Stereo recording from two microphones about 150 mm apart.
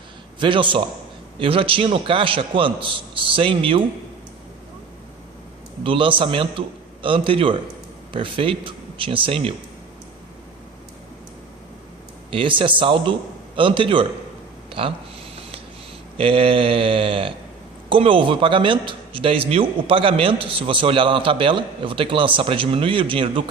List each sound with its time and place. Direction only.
0.3 s a man's voice: 35° right (ahead or behind)
5.8 s a man's voice: 35° right (ahead or behind)
12.3 s a man's voice: 35° right (ahead or behind)
16.1 s a man's voice: 40° right (ahead or behind)